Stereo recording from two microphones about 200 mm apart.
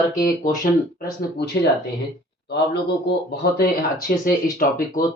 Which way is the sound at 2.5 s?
55° left (ahead or behind).